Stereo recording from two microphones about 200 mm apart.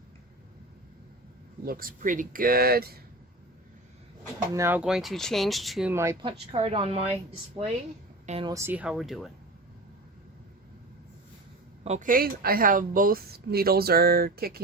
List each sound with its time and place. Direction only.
1.6 s a woman's voice: 45° right (ahead or behind)
4.5 s speech: 10° right (ahead or behind)
5.9 s speech: 15° right (ahead or behind)
6.5 s a woman's voice: 30° right (ahead or behind)
8.3 s a woman's voice: 25° right (ahead or behind)
8.5 s speech: 10° right (ahead or behind)
11.8 s a woman's voice: 35° right (ahead or behind)